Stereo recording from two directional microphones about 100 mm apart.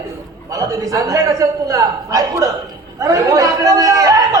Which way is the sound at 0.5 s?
35° right (ahead or behind).